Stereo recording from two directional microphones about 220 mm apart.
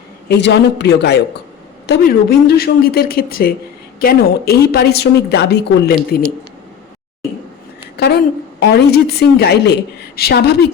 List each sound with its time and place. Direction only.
0.3 s a woman's voice: 50° left (ahead or behind)
7.9 s a sound: 50° left (ahead or behind)
8.6 s a woman's voice: 45° left (ahead or behind)